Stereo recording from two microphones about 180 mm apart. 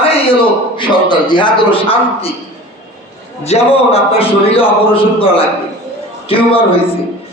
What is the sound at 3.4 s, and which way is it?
A man's voice, 35° left (ahead or behind).